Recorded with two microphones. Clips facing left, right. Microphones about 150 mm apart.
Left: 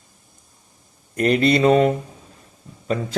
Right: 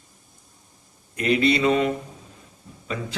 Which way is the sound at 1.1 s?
45° left (ahead or behind).